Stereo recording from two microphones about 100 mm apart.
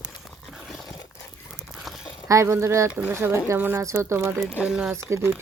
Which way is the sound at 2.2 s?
30° right (ahead or behind).